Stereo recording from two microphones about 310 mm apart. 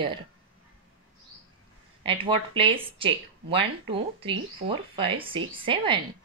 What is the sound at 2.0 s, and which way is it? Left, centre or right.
Speech, centre.